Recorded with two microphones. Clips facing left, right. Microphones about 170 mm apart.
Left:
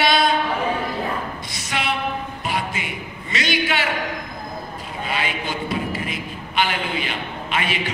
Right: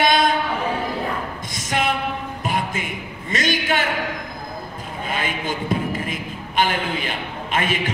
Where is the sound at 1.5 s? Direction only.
45° right (ahead or behind).